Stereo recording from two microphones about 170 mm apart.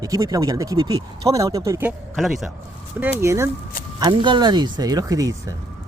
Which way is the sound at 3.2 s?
15° right (ahead or behind).